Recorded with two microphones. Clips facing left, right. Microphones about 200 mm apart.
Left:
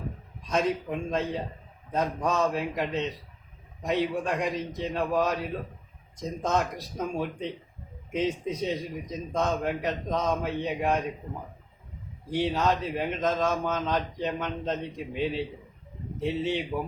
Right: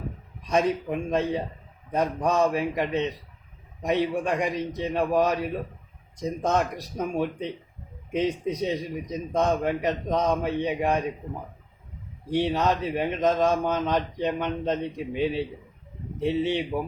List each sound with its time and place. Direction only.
0.5 s a man's voice: 15° right (ahead or behind)
12.3 s a man's voice: 15° right (ahead or behind)